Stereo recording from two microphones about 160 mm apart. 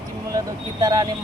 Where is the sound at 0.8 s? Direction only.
25° right (ahead or behind).